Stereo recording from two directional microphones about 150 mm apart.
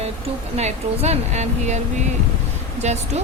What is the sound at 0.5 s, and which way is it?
A woman's voice, 45° right (ahead or behind).